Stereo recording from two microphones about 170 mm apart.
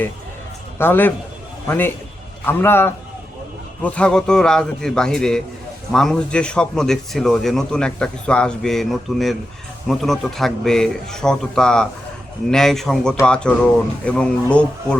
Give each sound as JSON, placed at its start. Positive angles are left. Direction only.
{"t": 0.8, "sound": "a man's voice", "side_deg": 10}